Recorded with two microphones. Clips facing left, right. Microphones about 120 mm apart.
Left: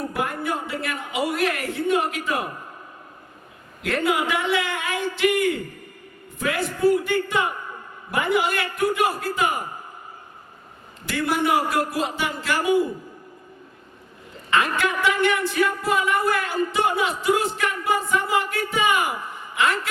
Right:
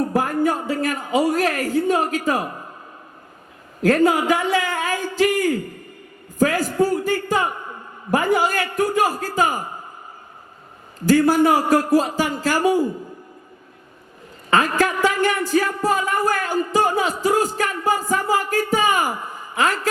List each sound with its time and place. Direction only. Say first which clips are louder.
0.1 s speech: right 6 dB; 40° right (ahead or behind)
3.8 s speech: right 6 dB; 40° right (ahead or behind)
11.0 s speech: right 8 dB; 40° right (ahead or behind)
14.5 s speech: right 4 dB; 40° right (ahead or behind)